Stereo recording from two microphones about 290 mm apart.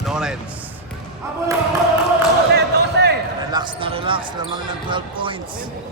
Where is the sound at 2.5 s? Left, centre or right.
Right.